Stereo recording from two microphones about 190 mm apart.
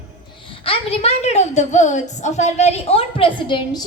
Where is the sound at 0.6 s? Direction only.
30° left (ahead or behind).